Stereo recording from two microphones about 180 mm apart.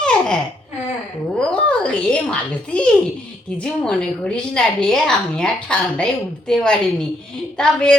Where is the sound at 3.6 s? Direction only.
5° left (ahead or behind).